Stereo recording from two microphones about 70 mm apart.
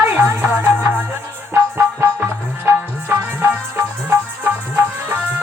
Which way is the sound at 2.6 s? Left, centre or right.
Right.